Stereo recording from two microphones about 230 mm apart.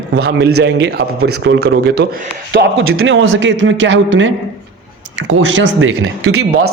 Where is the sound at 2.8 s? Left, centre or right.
Right.